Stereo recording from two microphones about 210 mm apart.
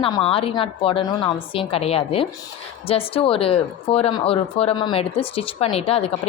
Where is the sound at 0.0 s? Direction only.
25° left (ahead or behind).